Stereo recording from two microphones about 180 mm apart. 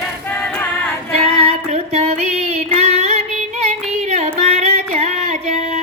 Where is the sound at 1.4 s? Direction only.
35° right (ahead or behind).